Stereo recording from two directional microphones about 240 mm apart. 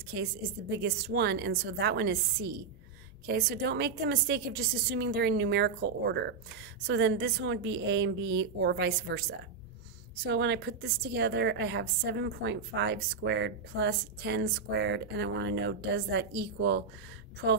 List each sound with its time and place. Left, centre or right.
0.0 s a woman's voice: right
10.2 s a woman's voice: right